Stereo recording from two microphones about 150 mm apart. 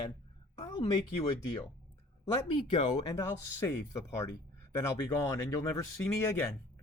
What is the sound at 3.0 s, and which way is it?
Speech, 20° left (ahead or behind).